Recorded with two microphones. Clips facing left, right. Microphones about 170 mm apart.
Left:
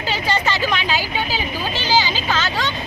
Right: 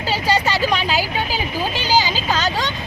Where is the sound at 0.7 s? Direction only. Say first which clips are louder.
Right 2 dB; 40° right (ahead or behind).